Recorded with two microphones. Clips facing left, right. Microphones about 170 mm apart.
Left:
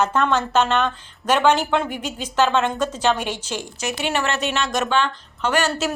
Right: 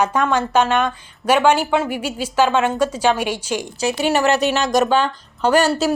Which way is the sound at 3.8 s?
35° right (ahead or behind).